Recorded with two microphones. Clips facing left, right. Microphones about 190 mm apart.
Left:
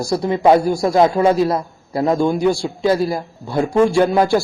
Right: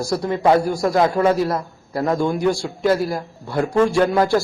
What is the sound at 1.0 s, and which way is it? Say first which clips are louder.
Speech: left 3 dB; 25° left (ahead or behind).